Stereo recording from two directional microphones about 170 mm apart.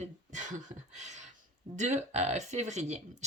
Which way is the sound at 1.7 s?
40° right (ahead or behind).